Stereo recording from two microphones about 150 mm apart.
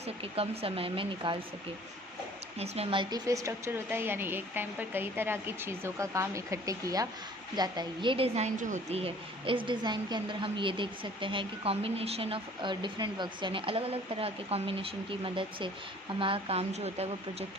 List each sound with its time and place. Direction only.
0.0 s a woman's voice: 40° right (ahead or behind)
2.6 s a woman's voice: 40° right (ahead or behind)
3.2 s a woman's voice: 20° right (ahead or behind); by 17.1 s 45° right (ahead or behind)